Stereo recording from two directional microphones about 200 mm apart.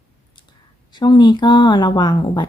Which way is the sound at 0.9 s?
20° left (ahead or behind).